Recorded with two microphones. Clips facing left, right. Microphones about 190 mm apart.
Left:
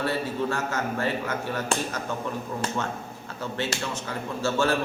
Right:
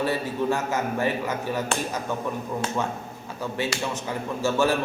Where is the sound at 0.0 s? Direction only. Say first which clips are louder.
Right 2 dB; 15° right (ahead or behind).